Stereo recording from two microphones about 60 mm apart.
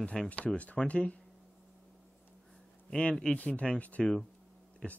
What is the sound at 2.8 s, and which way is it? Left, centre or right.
Speech, centre.